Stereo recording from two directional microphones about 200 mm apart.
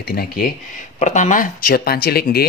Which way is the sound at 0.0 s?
50° left (ahead or behind).